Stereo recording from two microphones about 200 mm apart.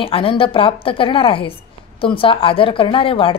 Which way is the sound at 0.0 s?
25° left (ahead or behind).